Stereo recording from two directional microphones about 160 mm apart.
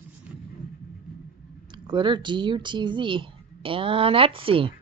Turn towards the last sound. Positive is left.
turn(degrees=-35)  # may be behind; listen again after turning